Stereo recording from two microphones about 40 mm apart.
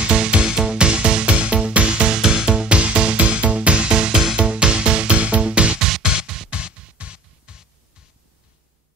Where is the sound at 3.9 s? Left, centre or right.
Centre.